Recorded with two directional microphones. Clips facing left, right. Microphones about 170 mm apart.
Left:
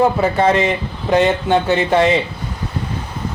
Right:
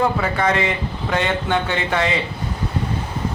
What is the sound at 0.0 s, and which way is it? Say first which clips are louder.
Speech: left 5 dB; 25° left (ahead or behind).